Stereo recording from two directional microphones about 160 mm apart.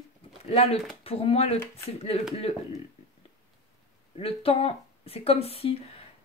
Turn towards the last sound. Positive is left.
turn(degrees=35)  # may be behind; listen again after turning